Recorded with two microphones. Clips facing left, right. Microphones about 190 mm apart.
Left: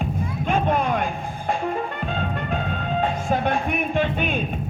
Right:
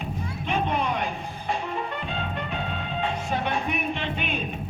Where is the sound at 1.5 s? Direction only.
45° left (ahead or behind).